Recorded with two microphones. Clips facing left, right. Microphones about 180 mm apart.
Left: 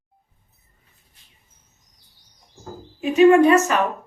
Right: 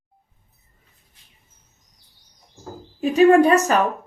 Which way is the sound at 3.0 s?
35° right (ahead or behind).